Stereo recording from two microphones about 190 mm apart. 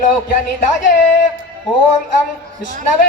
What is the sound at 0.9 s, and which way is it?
Male singing, 55° left (ahead or behind).